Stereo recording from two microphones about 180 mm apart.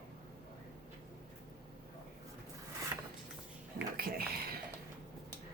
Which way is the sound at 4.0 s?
55° right (ahead or behind).